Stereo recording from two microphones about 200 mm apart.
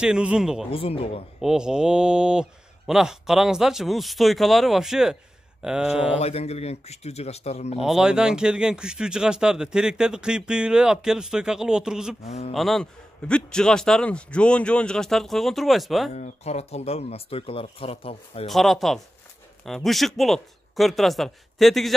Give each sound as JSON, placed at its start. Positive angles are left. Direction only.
{"t": 0.0, "sound": "speech", "side_deg": -5}
{"t": 0.7, "sound": "speech", "side_deg": 25}
{"t": 1.4, "sound": "speech", "side_deg": -5}
{"t": 6.1, "sound": "speech", "side_deg": 30}
{"t": 7.8, "sound": "speech", "side_deg": -5}
{"t": 12.3, "sound": "speech", "side_deg": 35}
{"t": 12.5, "sound": "speech", "side_deg": 0}
{"t": 16.2, "sound": "speech", "side_deg": 35}
{"t": 18.5, "sound": "speech", "side_deg": 0}